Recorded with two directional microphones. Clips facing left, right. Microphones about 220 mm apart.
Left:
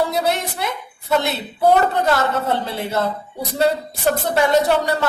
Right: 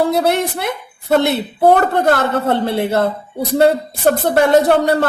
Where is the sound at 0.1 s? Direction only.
55° right (ahead or behind).